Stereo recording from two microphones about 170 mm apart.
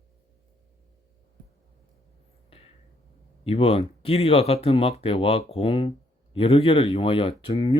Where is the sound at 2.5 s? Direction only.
35° left (ahead or behind).